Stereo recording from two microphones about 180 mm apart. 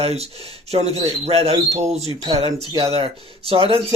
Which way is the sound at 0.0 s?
35° right (ahead or behind).